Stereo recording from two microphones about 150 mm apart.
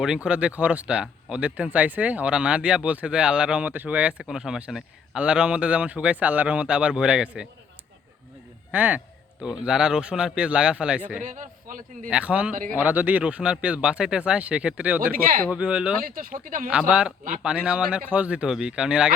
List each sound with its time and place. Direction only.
0.3 s speech: 10° right (ahead or behind)
8.7 s speech: 10° right (ahead or behind)
11.2 s a man's voice: 60° right (ahead or behind)
12.1 s speech: 10° right (ahead or behind)
16.0 s speech: 65° right (ahead or behind)
16.6 s speech: 5° right (ahead or behind)